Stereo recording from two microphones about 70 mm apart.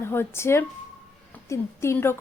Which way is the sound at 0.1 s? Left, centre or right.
Left.